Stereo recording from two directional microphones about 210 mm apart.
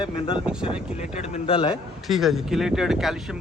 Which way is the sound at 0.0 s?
25° left (ahead or behind).